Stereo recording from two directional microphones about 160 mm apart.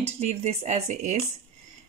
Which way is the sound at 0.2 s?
40° right (ahead or behind).